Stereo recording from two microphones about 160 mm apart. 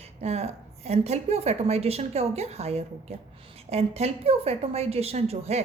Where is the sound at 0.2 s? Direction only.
40° right (ahead or behind).